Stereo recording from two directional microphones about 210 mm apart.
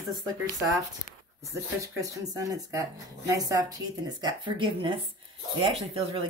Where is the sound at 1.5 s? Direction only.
15° right (ahead or behind).